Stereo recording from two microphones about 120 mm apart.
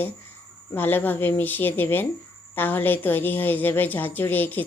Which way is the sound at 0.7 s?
15° left (ahead or behind).